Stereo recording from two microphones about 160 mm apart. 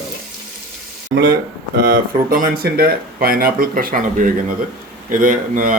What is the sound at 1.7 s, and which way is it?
A man's voice, 65° right (ahead or behind).